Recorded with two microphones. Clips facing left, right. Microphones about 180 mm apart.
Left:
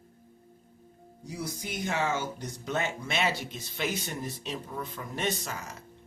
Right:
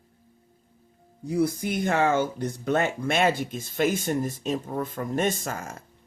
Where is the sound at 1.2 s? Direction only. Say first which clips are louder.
Right 12 dB; 55° right (ahead or behind).